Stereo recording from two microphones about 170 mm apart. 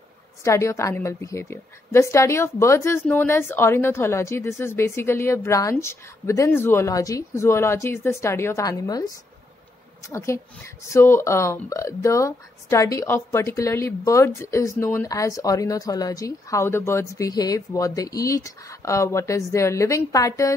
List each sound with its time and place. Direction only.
0.4 s speech: 15° left (ahead or behind)